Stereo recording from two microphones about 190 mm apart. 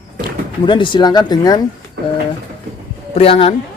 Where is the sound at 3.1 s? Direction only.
30° left (ahead or behind).